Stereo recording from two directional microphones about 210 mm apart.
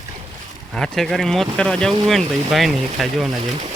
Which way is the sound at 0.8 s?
Centre (ahead or behind).